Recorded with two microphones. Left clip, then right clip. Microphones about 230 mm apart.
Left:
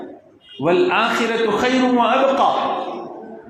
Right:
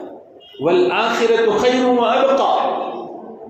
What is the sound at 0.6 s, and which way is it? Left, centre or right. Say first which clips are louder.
A man's voice: right 1 dB; left.